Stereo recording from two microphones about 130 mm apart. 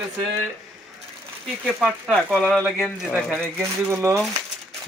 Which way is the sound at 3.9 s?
20° right (ahead or behind).